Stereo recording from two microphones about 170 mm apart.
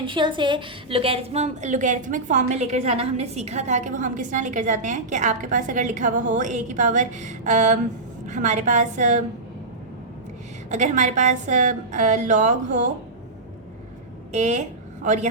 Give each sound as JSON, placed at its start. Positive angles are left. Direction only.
{"t": 0.0, "sound": "a woman's voice", "side_deg": -30}
{"t": 10.7, "sound": "a woman's voice", "side_deg": -45}
{"t": 14.3, "sound": "a woman's voice", "side_deg": -40}